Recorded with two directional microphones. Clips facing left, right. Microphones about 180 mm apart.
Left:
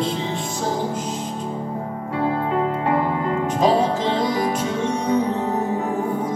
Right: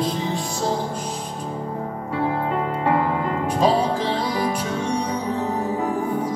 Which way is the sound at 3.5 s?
20° left (ahead or behind).